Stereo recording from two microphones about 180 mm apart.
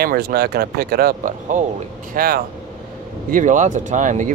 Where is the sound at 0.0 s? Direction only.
60° right (ahead or behind).